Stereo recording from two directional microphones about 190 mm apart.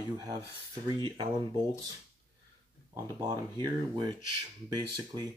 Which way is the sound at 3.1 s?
20° right (ahead or behind).